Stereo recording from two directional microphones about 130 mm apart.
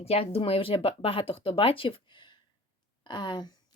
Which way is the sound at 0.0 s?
50° left (ahead or behind).